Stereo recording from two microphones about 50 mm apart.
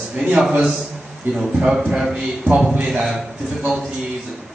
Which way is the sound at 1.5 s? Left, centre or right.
Centre.